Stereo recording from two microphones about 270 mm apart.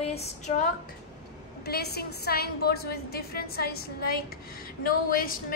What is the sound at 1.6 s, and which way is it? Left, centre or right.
A woman's voice, left.